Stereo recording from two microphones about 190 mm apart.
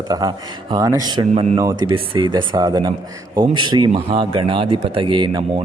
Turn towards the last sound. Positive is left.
turn(degrees=-25)  # may be behind; listen again after turning